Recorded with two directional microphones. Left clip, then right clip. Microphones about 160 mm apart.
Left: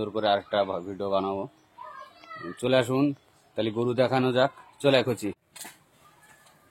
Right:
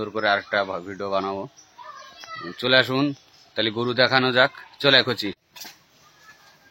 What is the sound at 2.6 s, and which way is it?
Speech, centre (ahead or behind).